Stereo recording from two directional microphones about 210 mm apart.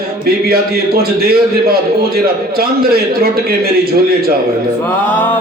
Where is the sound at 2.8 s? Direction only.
45° right (ahead or behind).